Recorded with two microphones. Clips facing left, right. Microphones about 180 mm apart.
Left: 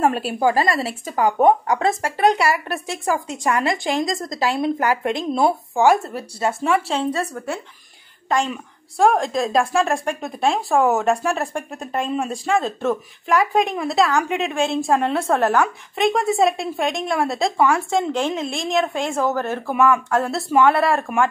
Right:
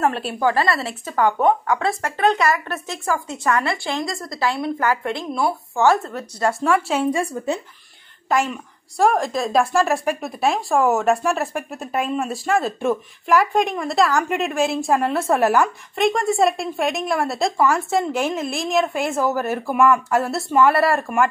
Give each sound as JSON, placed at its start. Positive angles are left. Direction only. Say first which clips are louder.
{"t": 0.0, "sound": "a woman's voice", "louder": "left 2 dB", "side_deg": 10}
{"t": 6.6, "sound": "speech", "louder": "right 1 dB", "side_deg": 0}
{"t": 8.9, "sound": "a woman's voice", "louder": "left 1 dB", "side_deg": 0}
{"t": 15.6, "sound": "a woman's voice", "louder": "even", "side_deg": 0}